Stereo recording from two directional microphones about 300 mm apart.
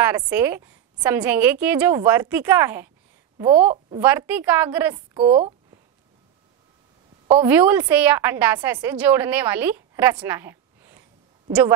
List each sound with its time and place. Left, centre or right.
0.0 s a woman's voice: centre
4.0 s a woman's voice: centre
5.1 s speech: centre
7.2 s a woman's voice: centre